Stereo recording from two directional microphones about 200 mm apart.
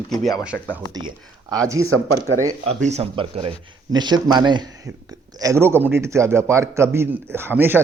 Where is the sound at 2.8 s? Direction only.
30° right (ahead or behind).